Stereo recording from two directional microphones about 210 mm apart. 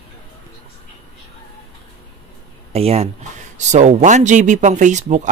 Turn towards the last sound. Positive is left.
turn(degrees=-35)  # may be behind; listen again after turning